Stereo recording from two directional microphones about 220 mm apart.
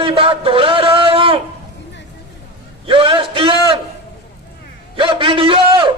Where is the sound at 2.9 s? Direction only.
25° right (ahead or behind).